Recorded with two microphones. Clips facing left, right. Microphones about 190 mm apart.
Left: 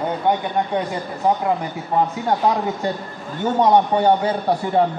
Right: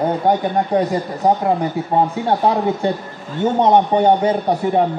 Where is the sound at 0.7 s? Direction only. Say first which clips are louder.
Right 8 dB; 35° right (ahead or behind).